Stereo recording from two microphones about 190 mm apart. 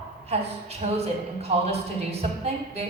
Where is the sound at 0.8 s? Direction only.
35° right (ahead or behind).